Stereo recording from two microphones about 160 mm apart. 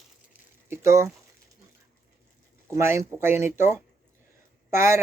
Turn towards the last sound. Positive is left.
turn(degrees=-15)  # may be behind; listen again after turning